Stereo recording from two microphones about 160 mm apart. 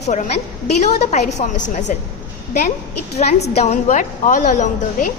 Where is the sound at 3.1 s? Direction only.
45° left (ahead or behind).